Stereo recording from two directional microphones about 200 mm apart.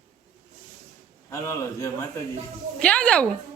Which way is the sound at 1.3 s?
15° left (ahead or behind).